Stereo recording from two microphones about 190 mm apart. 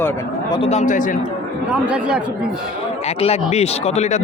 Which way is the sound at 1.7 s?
5° right (ahead or behind).